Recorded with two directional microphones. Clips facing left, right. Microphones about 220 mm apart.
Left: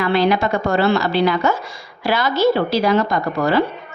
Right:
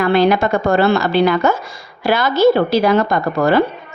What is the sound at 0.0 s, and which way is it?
A woman's voice, 50° right (ahead or behind).